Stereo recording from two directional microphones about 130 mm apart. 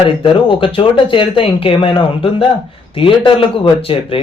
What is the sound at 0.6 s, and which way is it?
A man's voice, 45° left (ahead or behind).